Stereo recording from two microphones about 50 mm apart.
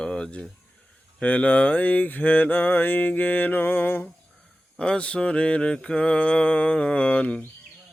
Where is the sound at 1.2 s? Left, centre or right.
Left.